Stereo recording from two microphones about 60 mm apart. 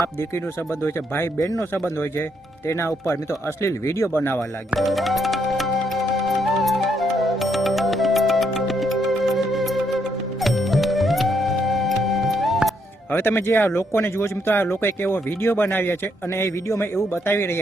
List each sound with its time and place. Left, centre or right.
0.9 s speech: left
2.6 s speech: left
4.1 s speech: left
4.7 s music: centre
13.1 s speech: left
17.2 s speech: left